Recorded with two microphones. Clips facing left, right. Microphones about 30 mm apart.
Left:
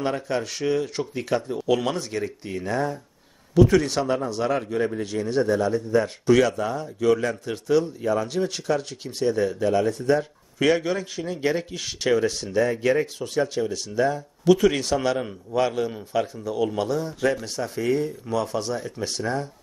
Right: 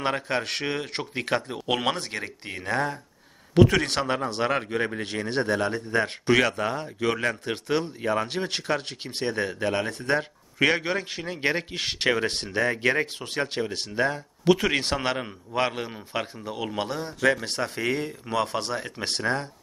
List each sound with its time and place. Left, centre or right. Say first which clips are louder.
0.0 s a man's voice: left 1 dB; right